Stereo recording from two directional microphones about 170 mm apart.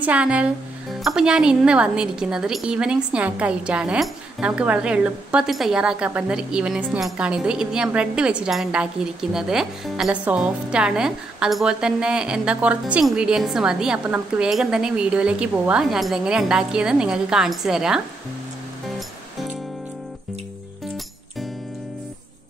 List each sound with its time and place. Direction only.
0.0 s a woman's voice: 10° right (ahead or behind)